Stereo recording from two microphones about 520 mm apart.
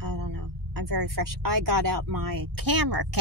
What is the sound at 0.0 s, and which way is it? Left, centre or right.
Speech, right.